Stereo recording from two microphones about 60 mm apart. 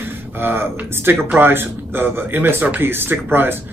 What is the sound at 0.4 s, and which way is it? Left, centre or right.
Speech, right.